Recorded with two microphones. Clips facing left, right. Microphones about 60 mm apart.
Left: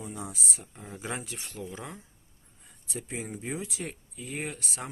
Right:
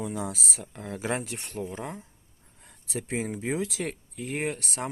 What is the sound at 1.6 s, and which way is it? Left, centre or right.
Speech, right.